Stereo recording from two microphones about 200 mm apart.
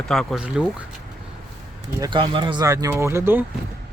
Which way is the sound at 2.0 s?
25° right (ahead or behind).